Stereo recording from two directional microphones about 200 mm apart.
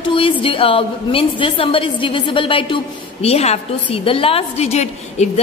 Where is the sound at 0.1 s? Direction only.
25° left (ahead or behind).